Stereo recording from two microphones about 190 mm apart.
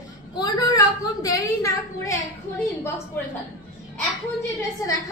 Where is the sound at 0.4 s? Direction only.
20° left (ahead or behind).